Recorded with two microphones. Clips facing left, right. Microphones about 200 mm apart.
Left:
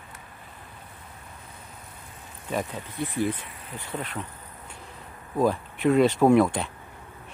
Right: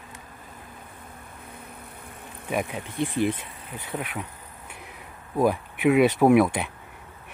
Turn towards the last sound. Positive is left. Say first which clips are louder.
# right 1 dB
turn(degrees=-10)  # may be behind; listen again after turning